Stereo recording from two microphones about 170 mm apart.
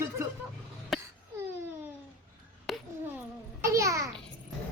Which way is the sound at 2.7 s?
Centre (ahead or behind).